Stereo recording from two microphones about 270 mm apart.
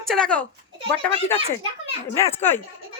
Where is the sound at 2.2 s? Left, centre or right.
Centre.